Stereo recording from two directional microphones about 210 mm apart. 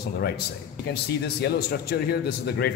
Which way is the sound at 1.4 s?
50° left (ahead or behind).